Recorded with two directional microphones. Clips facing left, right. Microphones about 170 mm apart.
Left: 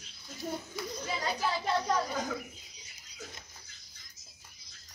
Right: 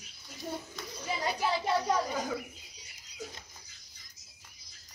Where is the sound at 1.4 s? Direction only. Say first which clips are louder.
Right 2 dB; 10° right (ahead or behind).